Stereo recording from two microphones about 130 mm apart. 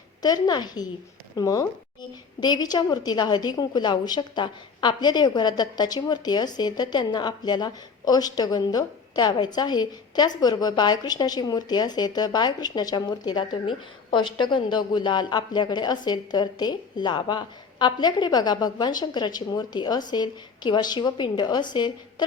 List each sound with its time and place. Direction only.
0.2 s a woman's voice: 30° left (ahead or behind)